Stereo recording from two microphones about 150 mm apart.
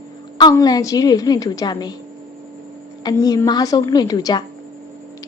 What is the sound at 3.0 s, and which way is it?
A woman's voice, 25° left (ahead or behind).